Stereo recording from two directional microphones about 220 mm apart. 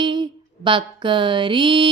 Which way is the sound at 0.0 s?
20° right (ahead or behind).